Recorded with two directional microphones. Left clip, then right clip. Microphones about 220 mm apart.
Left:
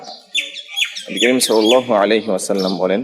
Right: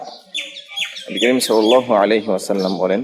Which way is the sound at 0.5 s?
35° left (ahead or behind).